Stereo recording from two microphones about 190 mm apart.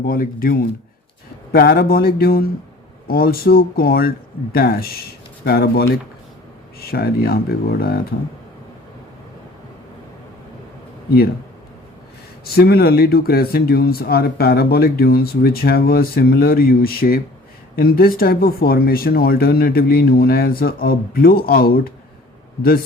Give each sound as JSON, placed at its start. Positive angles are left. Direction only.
{"t": 0.0, "sound": "speech", "side_deg": 50}
{"t": 12.5, "sound": "speech", "side_deg": 55}